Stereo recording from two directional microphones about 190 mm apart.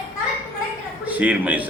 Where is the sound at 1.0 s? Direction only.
10° right (ahead or behind).